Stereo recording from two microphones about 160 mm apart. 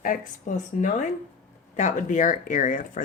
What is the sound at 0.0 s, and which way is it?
Speech, 55° left (ahead or behind).